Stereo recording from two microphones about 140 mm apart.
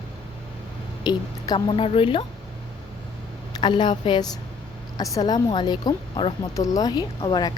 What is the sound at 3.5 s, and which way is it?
A woman's voice, 35° left (ahead or behind).